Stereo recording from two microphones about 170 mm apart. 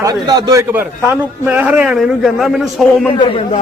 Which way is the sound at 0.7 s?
10° right (ahead or behind).